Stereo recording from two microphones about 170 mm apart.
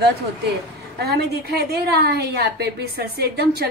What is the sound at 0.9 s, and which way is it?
A woman's voice, 75° right (ahead or behind).